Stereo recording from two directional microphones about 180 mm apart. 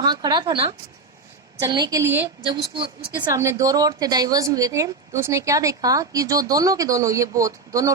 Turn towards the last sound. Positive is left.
turn(degrees=-20)  # may be behind; listen again after turning